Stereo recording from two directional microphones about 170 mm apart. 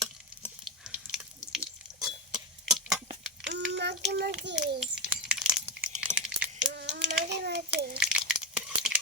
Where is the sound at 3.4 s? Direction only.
90° right.